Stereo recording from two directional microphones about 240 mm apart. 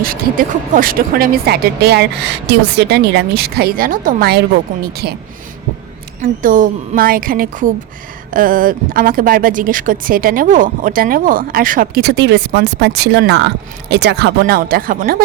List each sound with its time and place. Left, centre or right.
0.0 s speech: right
6.2 s speech: right